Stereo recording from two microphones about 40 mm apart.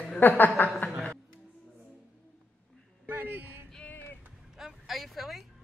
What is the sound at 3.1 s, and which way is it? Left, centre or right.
Speech, right.